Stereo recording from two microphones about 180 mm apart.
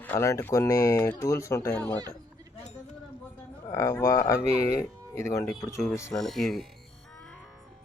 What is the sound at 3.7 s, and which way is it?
Speech, 20° left (ahead or behind).